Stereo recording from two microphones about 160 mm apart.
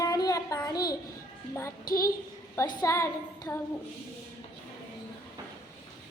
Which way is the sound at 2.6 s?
20° left (ahead or behind).